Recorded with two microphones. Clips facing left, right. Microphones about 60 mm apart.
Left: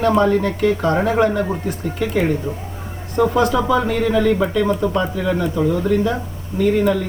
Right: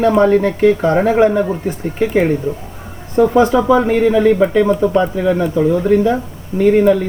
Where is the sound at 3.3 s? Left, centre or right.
Centre.